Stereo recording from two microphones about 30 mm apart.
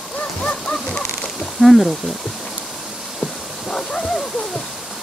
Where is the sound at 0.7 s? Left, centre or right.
Left.